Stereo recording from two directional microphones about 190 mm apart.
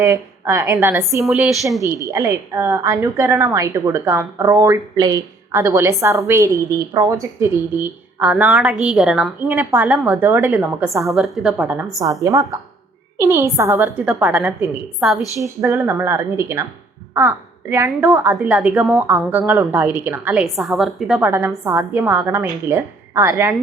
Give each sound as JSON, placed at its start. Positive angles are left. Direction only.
{"t": 0.0, "sound": "a woman's voice", "side_deg": -15}
{"t": 11.1, "sound": "a woman's voice", "side_deg": 0}
{"t": 15.4, "sound": "a woman's voice", "side_deg": -15}
{"t": 18.3, "sound": "a woman's voice", "side_deg": -5}